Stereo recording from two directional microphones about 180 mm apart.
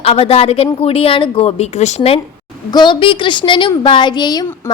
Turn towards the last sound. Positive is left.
turn(degrees=20)  # may be behind; listen again after turning